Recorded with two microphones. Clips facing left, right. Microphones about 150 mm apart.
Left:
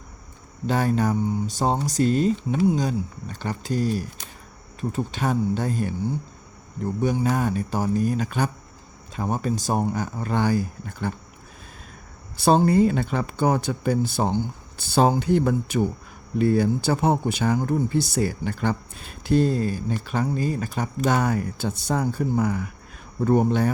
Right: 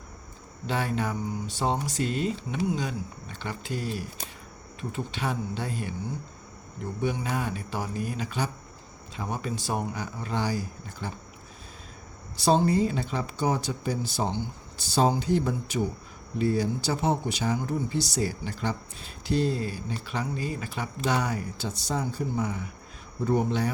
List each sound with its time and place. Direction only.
0.7 s speech: 40° left (ahead or behind)
7.0 s speech: 40° left (ahead or behind); by 11.1 s 55° left (ahead or behind)
12.4 s speech: 55° left (ahead or behind)
23.2 s speech: 50° left (ahead or behind)